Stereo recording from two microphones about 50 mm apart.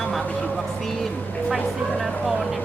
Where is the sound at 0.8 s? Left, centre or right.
Centre.